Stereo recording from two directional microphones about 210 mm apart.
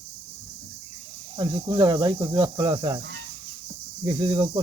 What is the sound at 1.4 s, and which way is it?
Speech, 20° right (ahead or behind).